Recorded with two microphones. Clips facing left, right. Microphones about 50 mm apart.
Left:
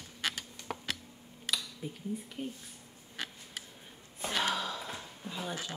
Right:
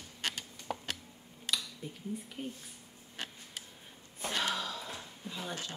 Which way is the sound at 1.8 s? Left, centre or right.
Centre.